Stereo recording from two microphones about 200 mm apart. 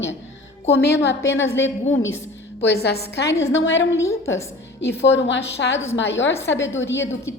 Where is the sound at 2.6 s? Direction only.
55° left (ahead or behind).